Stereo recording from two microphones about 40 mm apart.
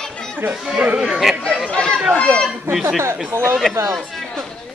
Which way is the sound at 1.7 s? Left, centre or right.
Left.